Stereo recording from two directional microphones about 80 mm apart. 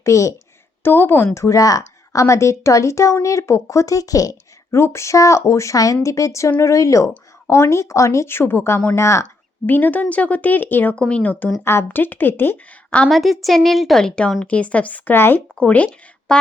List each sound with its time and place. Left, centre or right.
0.0 s a woman's voice: left
0.8 s a woman's voice: left
9.6 s a woman's voice: left
11.6 s a woman's voice: left
13.1 s a woman's voice: centre; by 15.4 s left
15.5 s a woman's voice: centre
16.3 s a sound: centre